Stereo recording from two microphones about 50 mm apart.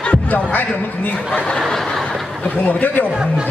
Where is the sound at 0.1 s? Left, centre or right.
Left.